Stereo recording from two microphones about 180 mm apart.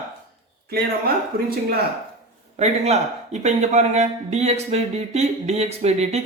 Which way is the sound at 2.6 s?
40° right (ahead or behind).